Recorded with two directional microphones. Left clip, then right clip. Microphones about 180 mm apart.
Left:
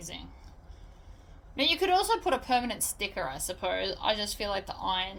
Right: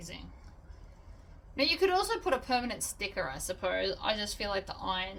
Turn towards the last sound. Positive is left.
turn(degrees=25)  # may be behind; listen again after turning